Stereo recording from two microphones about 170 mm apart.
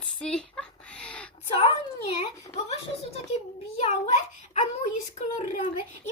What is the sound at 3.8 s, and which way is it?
Speech, 40° left (ahead or behind).